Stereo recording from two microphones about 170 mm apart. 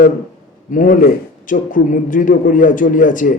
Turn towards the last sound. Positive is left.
turn(degrees=50)  # may be behind; listen again after turning